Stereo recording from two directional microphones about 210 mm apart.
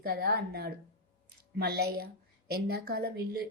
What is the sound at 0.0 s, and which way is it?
Speech, 45° right (ahead or behind).